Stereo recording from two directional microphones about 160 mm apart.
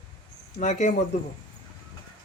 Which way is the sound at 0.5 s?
50° left (ahead or behind).